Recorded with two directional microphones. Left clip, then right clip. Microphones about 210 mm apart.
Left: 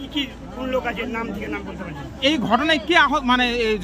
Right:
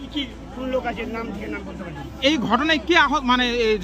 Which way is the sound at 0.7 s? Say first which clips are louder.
Left 1 dB; 5° left (ahead or behind).